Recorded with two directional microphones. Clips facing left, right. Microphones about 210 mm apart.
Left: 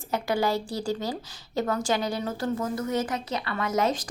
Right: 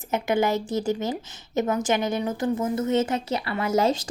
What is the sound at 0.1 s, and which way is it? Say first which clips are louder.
A woman's voice: right 3 dB; 20° right (ahead or behind).